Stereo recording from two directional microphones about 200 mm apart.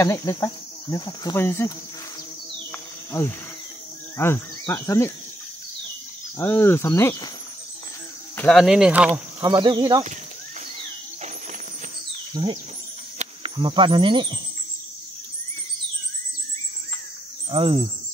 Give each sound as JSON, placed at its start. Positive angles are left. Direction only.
{"t": 0.0, "sound": "speech", "side_deg": 15}
{"t": 4.2, "sound": "speech", "side_deg": 10}
{"t": 6.3, "sound": "speech", "side_deg": 10}
{"t": 8.4, "sound": "speech", "side_deg": 0}
{"t": 9.4, "sound": "speech", "side_deg": -20}
{"t": 12.4, "sound": "speech", "side_deg": -25}
{"t": 17.5, "sound": "speech", "side_deg": -25}